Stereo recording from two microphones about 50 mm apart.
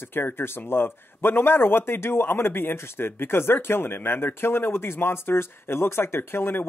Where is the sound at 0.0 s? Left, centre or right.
Left.